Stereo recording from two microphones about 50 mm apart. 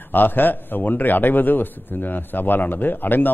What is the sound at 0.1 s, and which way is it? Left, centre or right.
A man's voice, left.